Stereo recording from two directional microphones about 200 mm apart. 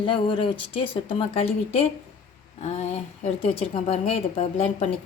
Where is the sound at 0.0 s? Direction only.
25° left (ahead or behind).